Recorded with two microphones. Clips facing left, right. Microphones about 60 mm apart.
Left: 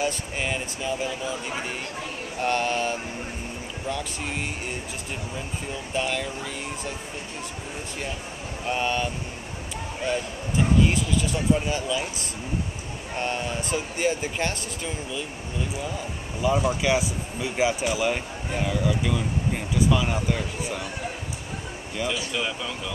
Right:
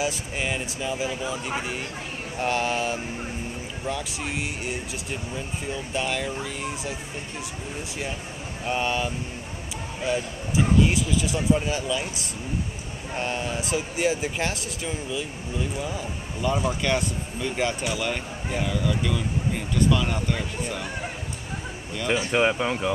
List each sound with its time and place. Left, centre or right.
0.0 s speech: centre
8.6 s speech: centre
22.0 s speech: right